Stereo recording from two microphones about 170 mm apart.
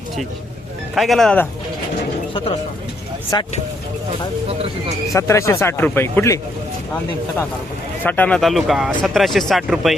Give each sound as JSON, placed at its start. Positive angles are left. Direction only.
{"t": 0.9, "sound": "speech", "side_deg": 0}
{"t": 2.3, "sound": "speech", "side_deg": 35}
{"t": 3.3, "sound": "speech", "side_deg": 25}
{"t": 5.1, "sound": "speech", "side_deg": 15}
{"t": 8.0, "sound": "speech", "side_deg": 10}